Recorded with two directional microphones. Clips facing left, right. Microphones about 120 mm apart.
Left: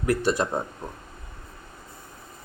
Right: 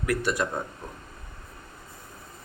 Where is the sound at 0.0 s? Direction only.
30° left (ahead or behind).